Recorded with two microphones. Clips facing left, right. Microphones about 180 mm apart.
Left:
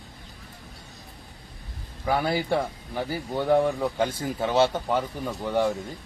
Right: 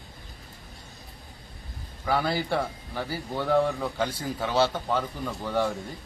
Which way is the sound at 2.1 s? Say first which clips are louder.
Left 2 dB; 15° left (ahead or behind).